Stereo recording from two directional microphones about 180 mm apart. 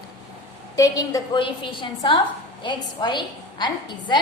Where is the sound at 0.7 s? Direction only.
20° left (ahead or behind).